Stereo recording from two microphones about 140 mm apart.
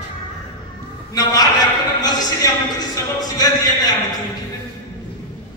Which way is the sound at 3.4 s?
25° left (ahead or behind).